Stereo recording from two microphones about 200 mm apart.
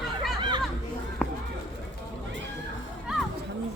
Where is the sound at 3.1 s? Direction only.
5° right (ahead or behind).